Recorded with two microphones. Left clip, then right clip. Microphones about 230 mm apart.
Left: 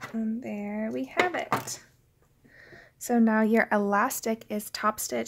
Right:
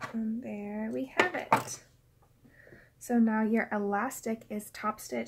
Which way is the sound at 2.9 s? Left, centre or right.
Left.